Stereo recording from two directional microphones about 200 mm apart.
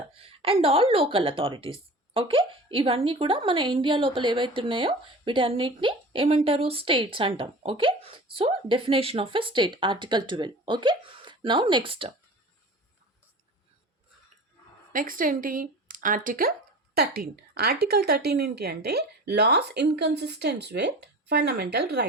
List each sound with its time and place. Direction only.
0.1 s a woman's voice: 30° right (ahead or behind)
14.9 s speech: 45° right (ahead or behind)